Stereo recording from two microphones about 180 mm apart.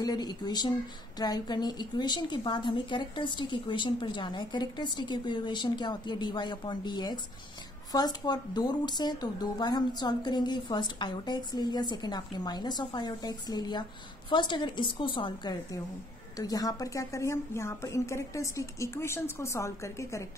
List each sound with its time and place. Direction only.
0.0 s a woman's voice: 20° left (ahead or behind)